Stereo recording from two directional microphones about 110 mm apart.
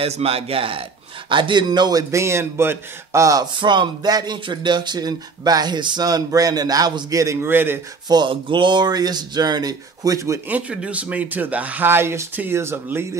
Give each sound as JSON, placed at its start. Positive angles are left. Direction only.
{"t": 0.0, "sound": "a man's voice", "side_deg": -60}
{"t": 3.5, "sound": "speech", "side_deg": -45}
{"t": 8.1, "sound": "speech", "side_deg": -45}
{"t": 10.5, "sound": "speech", "side_deg": -10}